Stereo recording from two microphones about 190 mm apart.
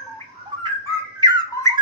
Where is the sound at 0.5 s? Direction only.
25° right (ahead or behind).